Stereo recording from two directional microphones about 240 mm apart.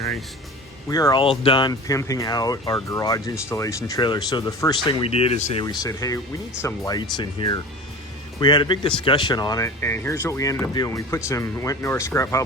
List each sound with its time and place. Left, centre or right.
0.9 s speech: centre
5.6 s speech: centre